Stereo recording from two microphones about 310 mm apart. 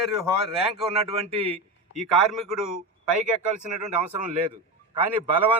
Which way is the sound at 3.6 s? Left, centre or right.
Right.